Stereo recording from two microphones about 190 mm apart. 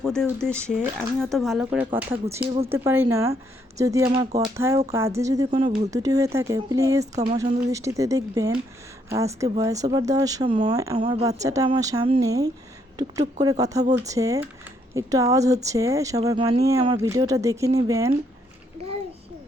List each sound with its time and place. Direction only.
0.0 s speech: 5° left (ahead or behind); by 5.5 s 15° right (ahead or behind)
5.5 s speech: 30° right (ahead or behind)
7.0 s speech: 35° right (ahead or behind)
7.3 s speech: 15° right (ahead or behind)
10.9 s speech: 35° right (ahead or behind)
11.3 s speech: 15° right (ahead or behind)